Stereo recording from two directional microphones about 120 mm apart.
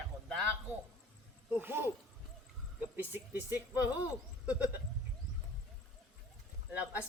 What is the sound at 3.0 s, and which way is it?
Speech, 20° right (ahead or behind).